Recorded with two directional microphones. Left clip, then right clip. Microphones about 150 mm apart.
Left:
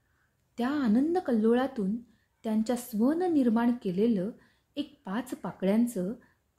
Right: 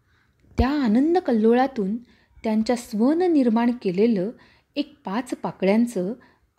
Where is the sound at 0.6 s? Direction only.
25° right (ahead or behind).